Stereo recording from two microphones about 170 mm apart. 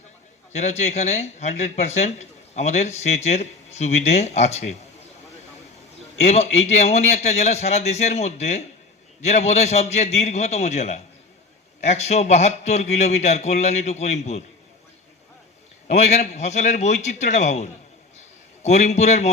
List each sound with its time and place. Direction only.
0.5 s a man's voice: 40° left (ahead or behind)
6.1 s a man's voice: 40° left (ahead or behind)
15.9 s a man's voice: 40° left (ahead or behind)